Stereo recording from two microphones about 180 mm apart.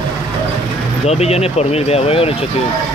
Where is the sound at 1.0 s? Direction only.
35° left (ahead or behind).